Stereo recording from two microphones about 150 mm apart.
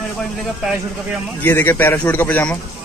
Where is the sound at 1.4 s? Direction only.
15° left (ahead or behind).